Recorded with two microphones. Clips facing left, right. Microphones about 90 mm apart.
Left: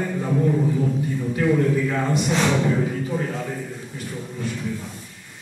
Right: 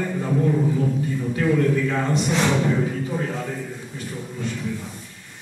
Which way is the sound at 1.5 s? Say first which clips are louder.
Right 1 dB; 20° left (ahead or behind).